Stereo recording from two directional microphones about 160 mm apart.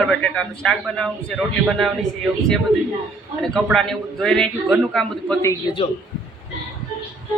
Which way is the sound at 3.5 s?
Centre (ahead or behind).